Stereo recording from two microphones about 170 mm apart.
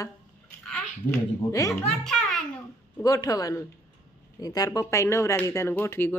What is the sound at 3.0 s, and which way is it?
A man's voice, 20° left (ahead or behind).